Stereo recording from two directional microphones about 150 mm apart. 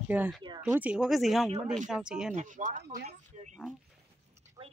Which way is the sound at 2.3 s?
60° right (ahead or behind).